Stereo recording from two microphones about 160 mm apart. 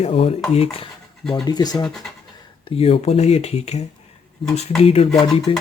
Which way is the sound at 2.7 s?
40° left (ahead or behind).